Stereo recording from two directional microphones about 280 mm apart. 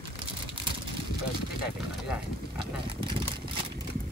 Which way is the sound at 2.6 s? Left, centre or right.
Centre.